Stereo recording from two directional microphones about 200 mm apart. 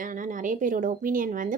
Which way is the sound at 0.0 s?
40° right (ahead or behind).